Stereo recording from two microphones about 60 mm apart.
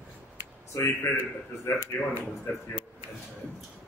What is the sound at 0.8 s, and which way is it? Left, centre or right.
A man's voice, left.